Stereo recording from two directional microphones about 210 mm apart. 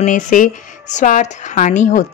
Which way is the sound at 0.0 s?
40° left (ahead or behind).